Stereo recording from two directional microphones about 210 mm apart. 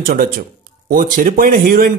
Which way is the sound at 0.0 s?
40° right (ahead or behind).